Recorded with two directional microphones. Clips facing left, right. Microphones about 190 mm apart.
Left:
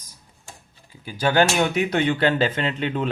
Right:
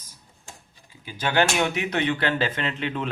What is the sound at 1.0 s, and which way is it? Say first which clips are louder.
Speech: left 4 dB; 40° left (ahead or behind).